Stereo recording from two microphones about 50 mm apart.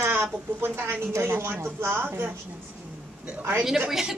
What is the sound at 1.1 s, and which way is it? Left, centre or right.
A woman's voice, right.